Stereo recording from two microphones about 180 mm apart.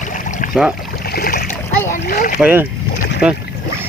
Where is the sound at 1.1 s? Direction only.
55° left (ahead or behind).